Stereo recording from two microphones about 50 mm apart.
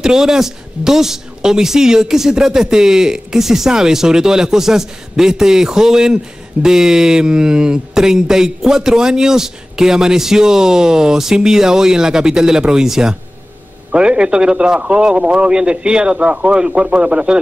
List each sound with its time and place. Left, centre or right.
0.0 s a man's voice: centre